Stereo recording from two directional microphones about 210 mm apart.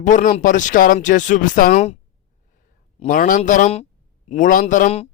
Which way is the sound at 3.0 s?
40° left (ahead or behind).